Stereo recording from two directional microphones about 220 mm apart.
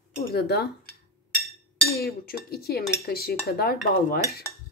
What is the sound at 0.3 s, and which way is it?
Cutlery, 45° left (ahead or behind).